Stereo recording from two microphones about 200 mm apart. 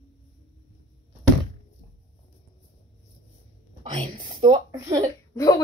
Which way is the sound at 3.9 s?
25° right (ahead or behind).